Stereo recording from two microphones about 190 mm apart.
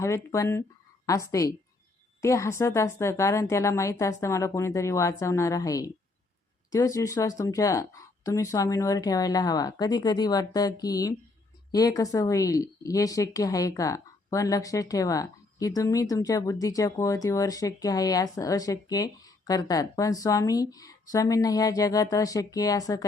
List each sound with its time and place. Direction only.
0.0 s speech: 15° left (ahead or behind)